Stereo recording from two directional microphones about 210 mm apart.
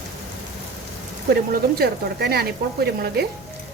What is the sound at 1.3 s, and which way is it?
Speech, 50° right (ahead or behind).